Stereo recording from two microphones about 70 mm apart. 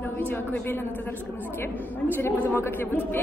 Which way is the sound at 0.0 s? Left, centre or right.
Left.